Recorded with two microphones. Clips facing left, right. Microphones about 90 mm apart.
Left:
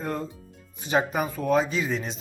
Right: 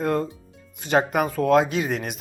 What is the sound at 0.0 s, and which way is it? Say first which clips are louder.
Speech: right 7 dB; 65° right (ahead or behind).